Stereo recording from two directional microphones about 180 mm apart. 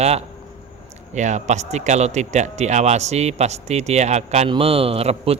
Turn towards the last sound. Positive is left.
turn(degrees=-35)  # may be behind; listen again after turning